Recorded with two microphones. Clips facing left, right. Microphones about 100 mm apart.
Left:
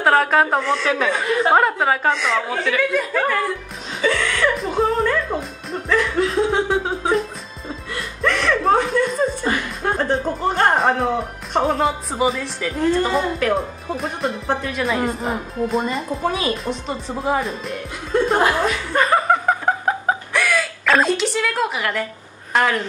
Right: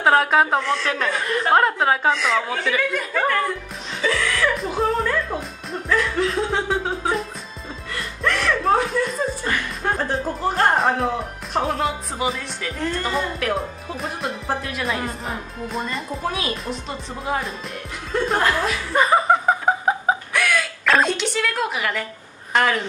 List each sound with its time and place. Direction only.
0.0 s speech: 5° right (ahead or behind)
18.6 s chuckle: centre (ahead or behind)
22.5 s speech: centre (ahead or behind)